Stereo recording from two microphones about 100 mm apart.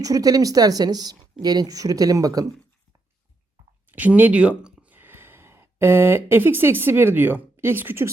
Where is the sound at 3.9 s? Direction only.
15° right (ahead or behind).